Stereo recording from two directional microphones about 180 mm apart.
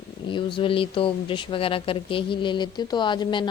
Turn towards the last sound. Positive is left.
turn(degrees=25)  # may be behind; listen again after turning